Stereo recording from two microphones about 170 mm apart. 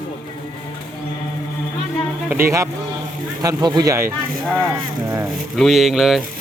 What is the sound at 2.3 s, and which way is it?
Speech, 15° right (ahead or behind).